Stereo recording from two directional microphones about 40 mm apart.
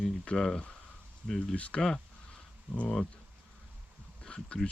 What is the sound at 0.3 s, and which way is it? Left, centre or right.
Speech, centre.